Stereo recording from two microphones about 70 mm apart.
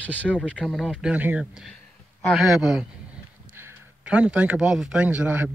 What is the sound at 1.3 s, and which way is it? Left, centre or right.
A man's voice, centre.